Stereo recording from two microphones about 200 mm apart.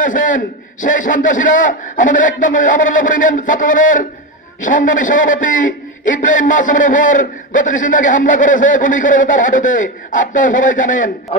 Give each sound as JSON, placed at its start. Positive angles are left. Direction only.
{"t": 0.0, "sound": "a man's voice", "side_deg": 40}